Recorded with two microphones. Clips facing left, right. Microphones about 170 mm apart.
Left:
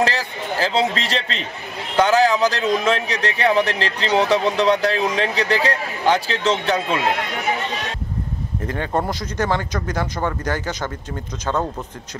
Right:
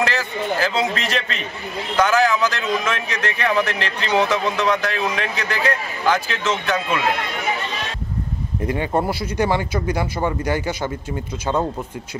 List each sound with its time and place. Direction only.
0.0 s speech: 30° left (ahead or behind)
8.6 s speech: 10° right (ahead or behind)